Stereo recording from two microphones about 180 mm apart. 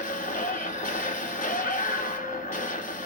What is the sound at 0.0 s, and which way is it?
Music, 45° left (ahead or behind).